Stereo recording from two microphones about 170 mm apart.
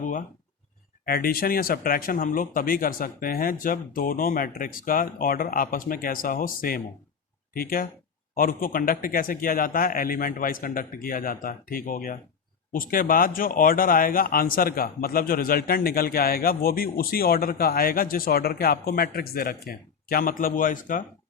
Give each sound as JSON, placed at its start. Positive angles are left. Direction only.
{"t": 0.0, "sound": "speech", "side_deg": 50}